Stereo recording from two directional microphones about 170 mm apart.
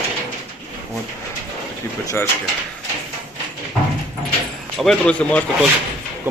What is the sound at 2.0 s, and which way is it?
Speech, 20° left (ahead or behind).